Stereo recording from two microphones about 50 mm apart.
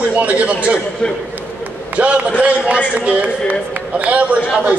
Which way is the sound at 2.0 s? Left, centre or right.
Right.